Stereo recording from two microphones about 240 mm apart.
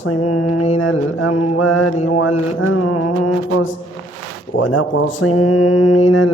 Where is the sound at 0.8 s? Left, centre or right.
Left.